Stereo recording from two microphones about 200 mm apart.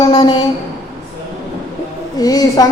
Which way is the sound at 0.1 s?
20° left (ahead or behind).